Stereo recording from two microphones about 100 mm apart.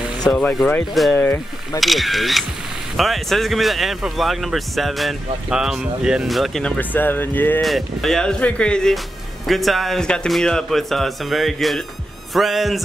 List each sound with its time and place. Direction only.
0.3 s speech: 5° left (ahead or behind)
1.1 s speech: 20° left (ahead or behind)
1.8 s speech: centre (ahead or behind)
6.6 s speech: 15° left (ahead or behind)
7.6 s speech: centre (ahead or behind)